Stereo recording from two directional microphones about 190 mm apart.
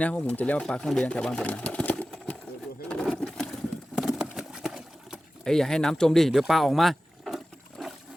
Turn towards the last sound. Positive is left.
turn(degrees=0)  # may be behind; listen again after turning